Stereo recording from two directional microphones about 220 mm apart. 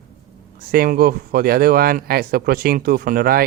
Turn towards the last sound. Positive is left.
turn(degrees=-40)  # may be behind; listen again after turning